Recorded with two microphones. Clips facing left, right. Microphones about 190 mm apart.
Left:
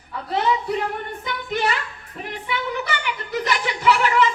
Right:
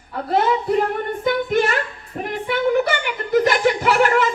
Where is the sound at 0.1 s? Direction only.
50° right (ahead or behind).